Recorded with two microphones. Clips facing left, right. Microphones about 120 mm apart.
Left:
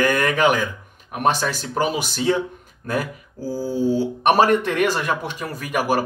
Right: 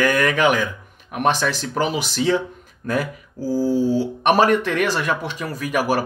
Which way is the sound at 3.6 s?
15° left (ahead or behind).